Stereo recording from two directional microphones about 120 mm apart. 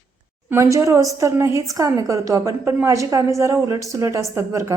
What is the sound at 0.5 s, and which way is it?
A woman's voice, 25° right (ahead or behind).